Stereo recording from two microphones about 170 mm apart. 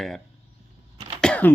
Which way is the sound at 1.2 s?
5° left (ahead or behind).